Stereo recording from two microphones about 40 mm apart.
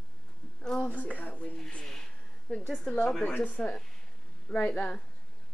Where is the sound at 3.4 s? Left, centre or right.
Left.